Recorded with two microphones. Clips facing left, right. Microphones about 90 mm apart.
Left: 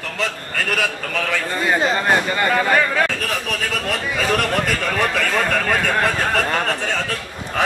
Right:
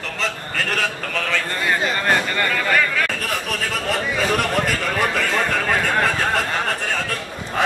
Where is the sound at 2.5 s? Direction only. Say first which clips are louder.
Left 4 dB; 30° left (ahead or behind).